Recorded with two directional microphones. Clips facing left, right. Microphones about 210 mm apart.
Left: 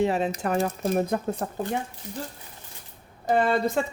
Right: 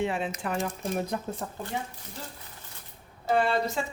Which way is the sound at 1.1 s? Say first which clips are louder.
Left 5 dB; 50° left (ahead or behind).